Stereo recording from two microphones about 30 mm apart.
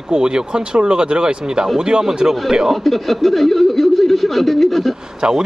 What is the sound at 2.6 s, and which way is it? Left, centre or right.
Speech, centre.